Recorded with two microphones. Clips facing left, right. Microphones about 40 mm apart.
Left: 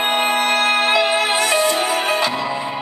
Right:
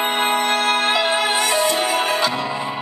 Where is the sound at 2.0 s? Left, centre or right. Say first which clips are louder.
Left 1 dB; centre.